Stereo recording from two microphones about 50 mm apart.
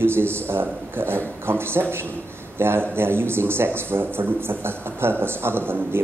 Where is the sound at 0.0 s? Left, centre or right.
Right.